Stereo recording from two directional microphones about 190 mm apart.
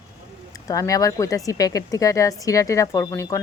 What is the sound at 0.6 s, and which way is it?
Speech, 20° left (ahead or behind).